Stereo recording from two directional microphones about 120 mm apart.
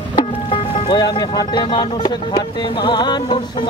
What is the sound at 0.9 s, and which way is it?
Speech, 35° left (ahead or behind).